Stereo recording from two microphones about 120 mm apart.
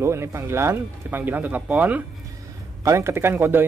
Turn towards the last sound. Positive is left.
turn(degrees=-15)  # may be behind; listen again after turning